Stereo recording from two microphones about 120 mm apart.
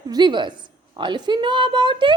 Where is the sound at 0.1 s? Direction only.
40° right (ahead or behind).